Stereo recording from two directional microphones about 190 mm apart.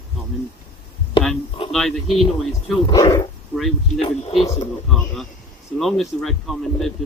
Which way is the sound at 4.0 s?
30° left (ahead or behind).